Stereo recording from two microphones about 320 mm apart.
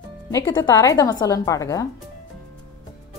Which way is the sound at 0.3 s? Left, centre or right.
Centre.